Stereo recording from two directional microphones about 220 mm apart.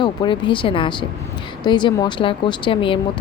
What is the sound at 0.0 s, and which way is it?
Speech, 20° left (ahead or behind).